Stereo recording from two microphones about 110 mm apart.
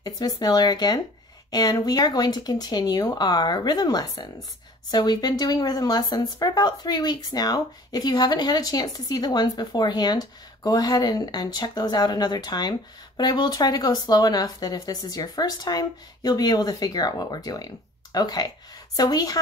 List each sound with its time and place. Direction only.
0.4 s speech: 35° left (ahead or behind)